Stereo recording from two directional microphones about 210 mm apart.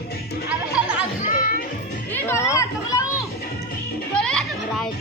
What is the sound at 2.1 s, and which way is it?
Chatter, 10° left (ahead or behind).